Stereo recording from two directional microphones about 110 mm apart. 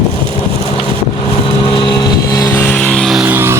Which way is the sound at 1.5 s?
50° left (ahead or behind).